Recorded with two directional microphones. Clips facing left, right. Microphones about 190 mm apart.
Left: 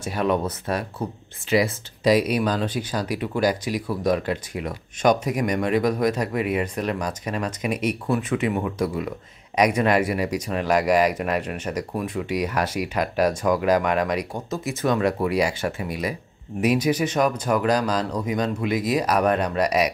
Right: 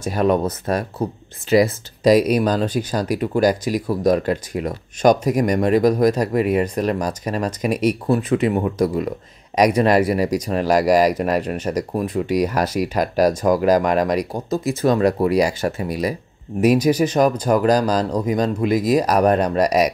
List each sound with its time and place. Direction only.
0.0 s speech: 40° right (ahead or behind)